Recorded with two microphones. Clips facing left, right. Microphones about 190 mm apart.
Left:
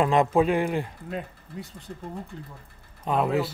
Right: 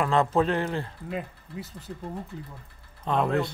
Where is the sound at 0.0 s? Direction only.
15° left (ahead or behind).